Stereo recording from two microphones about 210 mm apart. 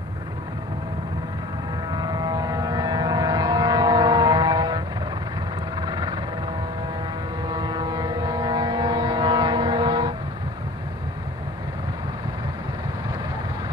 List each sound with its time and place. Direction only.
1.9 s vehicle: 20° right (ahead or behind)
5.8 s helicopter: 20° right (ahead or behind)
7.4 s ship: 20° right (ahead or behind)